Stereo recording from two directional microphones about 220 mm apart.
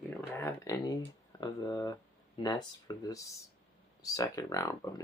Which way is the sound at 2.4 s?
20° left (ahead or behind).